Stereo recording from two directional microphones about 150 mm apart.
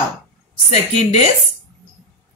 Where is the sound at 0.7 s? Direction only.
45° left (ahead or behind).